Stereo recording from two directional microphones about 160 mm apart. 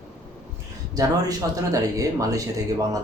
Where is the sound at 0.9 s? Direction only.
20° right (ahead or behind).